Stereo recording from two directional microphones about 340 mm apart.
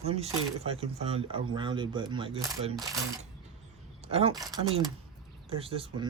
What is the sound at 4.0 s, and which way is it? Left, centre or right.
Speech, centre.